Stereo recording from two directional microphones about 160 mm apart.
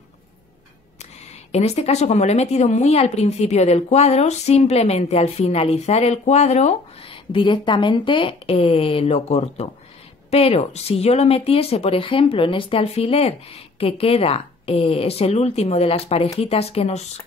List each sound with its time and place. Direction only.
1.5 s speech: 40° left (ahead or behind)